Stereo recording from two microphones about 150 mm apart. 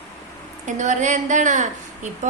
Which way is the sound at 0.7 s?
55° right (ahead or behind).